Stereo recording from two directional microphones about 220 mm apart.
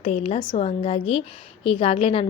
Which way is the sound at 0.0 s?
30° left (ahead or behind).